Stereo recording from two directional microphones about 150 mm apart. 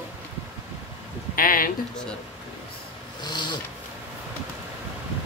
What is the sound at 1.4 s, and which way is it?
Speech, 70° left (ahead or behind).